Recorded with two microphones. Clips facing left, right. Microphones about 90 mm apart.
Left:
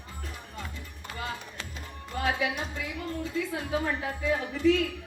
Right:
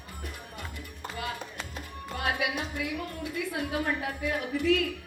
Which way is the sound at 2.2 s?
65° right (ahead or behind).